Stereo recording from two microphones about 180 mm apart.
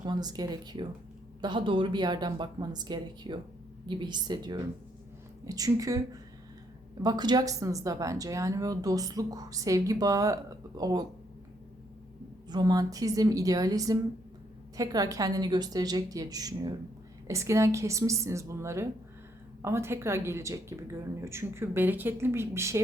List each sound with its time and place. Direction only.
0.0 s speech: 25° right (ahead or behind)
12.5 s speech: 20° right (ahead or behind)